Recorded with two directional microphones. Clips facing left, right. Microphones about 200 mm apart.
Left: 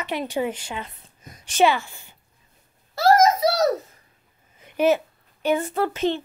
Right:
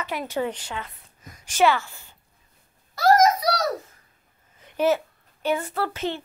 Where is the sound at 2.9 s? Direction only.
25° left (ahead or behind).